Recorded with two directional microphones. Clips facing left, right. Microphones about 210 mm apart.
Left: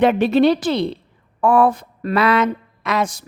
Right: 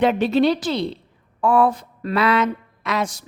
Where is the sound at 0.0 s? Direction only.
60° left (ahead or behind).